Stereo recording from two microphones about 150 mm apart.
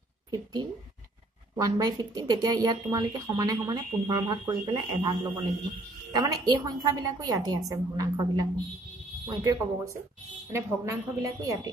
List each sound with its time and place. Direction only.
0.3 s a woman's voice: 25° right (ahead or behind)